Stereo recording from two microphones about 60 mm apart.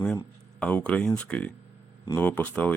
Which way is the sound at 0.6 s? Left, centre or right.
Centre.